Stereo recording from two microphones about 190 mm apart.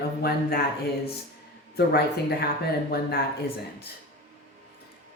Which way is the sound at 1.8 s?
55° left (ahead or behind).